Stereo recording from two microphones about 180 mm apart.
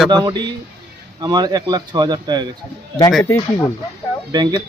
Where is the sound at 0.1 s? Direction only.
25° right (ahead or behind).